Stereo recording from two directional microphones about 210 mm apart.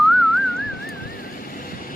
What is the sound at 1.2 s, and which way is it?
Music, 40° left (ahead or behind).